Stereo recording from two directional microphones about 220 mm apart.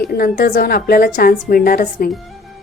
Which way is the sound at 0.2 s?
45° left (ahead or behind).